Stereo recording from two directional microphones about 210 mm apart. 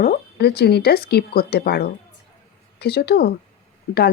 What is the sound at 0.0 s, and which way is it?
Speech, 50° left (ahead or behind).